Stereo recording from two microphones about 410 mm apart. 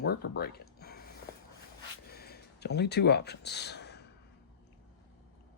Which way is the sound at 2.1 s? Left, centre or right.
Left.